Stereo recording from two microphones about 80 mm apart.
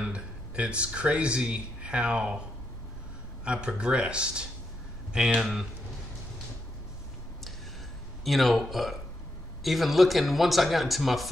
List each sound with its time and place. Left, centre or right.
0.0 s speech: centre
3.4 s speech: centre
8.2 s speech: centre